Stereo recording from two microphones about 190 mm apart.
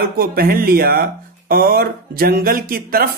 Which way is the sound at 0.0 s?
55° right (ahead or behind).